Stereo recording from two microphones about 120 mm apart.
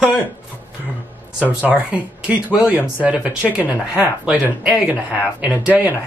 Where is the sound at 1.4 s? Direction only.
10° right (ahead or behind).